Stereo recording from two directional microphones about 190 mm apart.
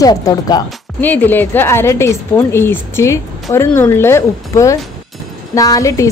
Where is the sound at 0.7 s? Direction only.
10° left (ahead or behind).